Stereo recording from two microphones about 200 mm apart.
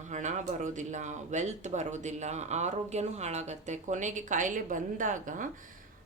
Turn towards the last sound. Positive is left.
turn(degrees=-40)  # may be behind; listen again after turning